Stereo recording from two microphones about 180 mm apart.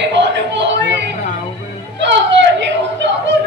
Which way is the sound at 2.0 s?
80° right.